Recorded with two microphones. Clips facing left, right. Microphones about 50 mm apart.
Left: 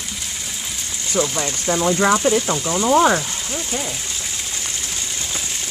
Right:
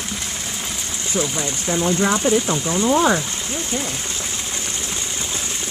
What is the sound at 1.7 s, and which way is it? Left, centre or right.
Speech, centre.